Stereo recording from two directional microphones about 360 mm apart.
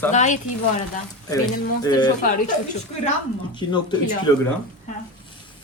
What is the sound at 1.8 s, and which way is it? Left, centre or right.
Speech, centre.